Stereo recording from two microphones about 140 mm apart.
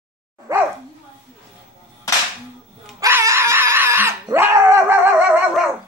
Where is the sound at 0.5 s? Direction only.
20° right (ahead or behind).